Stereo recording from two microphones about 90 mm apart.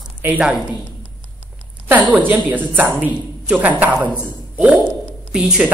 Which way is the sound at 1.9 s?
15° right (ahead or behind).